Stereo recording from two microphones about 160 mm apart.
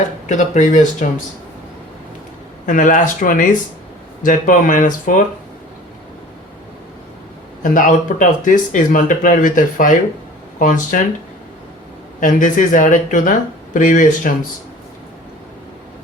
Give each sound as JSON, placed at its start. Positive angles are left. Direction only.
{"t": 0.3, "sound": "speech", "side_deg": 50}
{"t": 2.6, "sound": "speech", "side_deg": 55}
{"t": 7.6, "sound": "speech", "side_deg": 55}
{"t": 12.2, "sound": "speech", "side_deg": 55}